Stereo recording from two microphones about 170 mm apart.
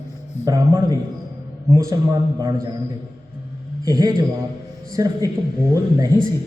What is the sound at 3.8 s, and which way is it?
A man's voice, 20° right (ahead or behind).